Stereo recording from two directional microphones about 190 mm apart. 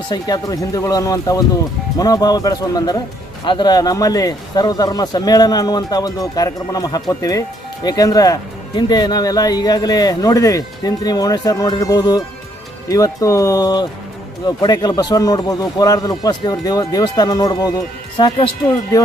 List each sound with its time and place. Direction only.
0.1 s speech: 20° left (ahead or behind)